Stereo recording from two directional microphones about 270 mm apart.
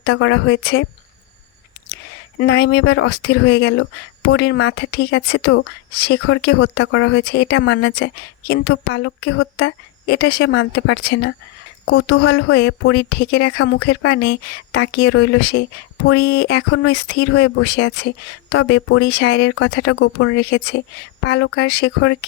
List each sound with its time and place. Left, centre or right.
0.0 s speech: left
2.4 s speech: left